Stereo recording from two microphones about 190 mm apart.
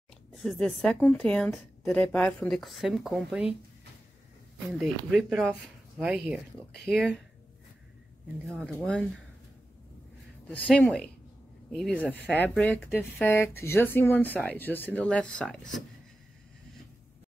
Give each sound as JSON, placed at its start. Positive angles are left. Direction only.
{"t": 0.4, "sound": "a woman's voice", "side_deg": 5}
{"t": 4.7, "sound": "a woman's voice", "side_deg": -5}
{"t": 8.6, "sound": "a woman's voice", "side_deg": 5}
{"t": 10.7, "sound": "a woman's voice", "side_deg": 5}